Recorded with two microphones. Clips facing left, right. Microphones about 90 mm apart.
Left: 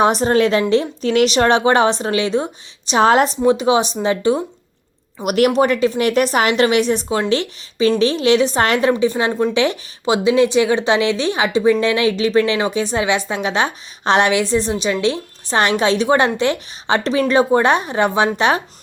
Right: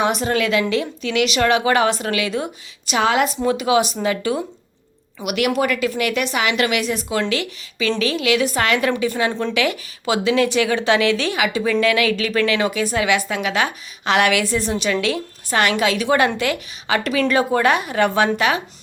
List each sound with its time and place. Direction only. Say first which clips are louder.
0.0 s speech: left 5 dB; 35° left (ahead or behind)
3.4 s a woman's voice: left 3 dB; 25° left (ahead or behind)
5.2 s a woman's voice: left 5 dB; 40° left (ahead or behind)